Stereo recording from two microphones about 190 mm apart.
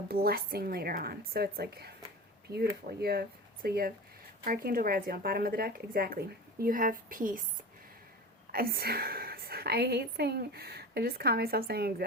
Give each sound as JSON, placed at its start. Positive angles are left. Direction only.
{"t": 0.1, "sound": "speech", "side_deg": -55}
{"t": 3.0, "sound": "speech", "side_deg": -55}
{"t": 8.5, "sound": "a woman's voice", "side_deg": -55}